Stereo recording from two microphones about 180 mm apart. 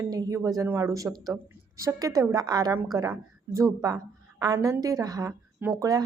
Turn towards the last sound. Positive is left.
turn(degrees=-20)  # may be behind; listen again after turning